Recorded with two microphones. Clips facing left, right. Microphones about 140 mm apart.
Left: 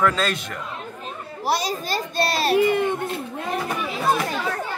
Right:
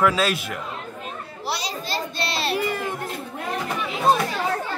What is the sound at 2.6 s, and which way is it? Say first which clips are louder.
Speech: left 6 dB; 25° left (ahead or behind).